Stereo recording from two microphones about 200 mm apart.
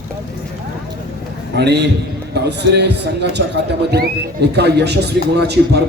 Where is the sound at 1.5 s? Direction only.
55° right (ahead or behind).